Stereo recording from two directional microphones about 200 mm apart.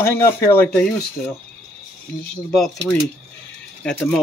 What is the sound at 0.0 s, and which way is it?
Speech, 15° left (ahead or behind).